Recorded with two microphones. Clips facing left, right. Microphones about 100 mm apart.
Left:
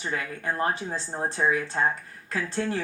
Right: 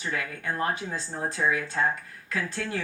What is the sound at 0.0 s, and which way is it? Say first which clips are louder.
Speech: left 1 dB; 30° left (ahead or behind).